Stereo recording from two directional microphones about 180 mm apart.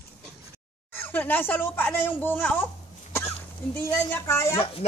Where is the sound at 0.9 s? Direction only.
10° left (ahead or behind).